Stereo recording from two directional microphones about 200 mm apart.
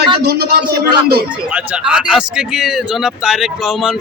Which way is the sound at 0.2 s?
50° right (ahead or behind).